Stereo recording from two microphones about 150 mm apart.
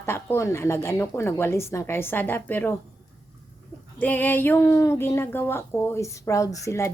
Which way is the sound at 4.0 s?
10° left (ahead or behind).